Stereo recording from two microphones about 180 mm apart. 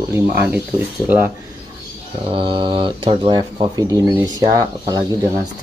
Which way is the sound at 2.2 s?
30° right (ahead or behind).